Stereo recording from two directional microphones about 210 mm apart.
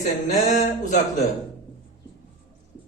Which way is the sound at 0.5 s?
35° left (ahead or behind).